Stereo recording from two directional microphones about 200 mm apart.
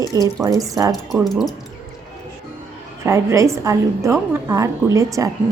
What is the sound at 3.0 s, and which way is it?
A woman's voice, 15° right (ahead or behind).